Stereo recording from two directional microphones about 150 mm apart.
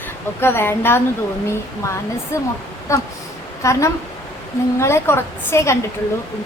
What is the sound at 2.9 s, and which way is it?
A woman's voice, 20° left (ahead or behind).